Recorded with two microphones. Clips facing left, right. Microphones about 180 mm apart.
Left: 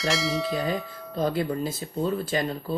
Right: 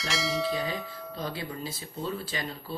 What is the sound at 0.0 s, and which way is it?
Bell, centre (ahead or behind).